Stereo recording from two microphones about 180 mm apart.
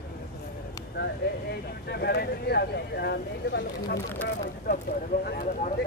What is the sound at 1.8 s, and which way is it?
Speech, 65° left (ahead or behind).